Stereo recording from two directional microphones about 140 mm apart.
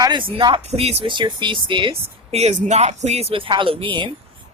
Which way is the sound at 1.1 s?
35° right (ahead or behind).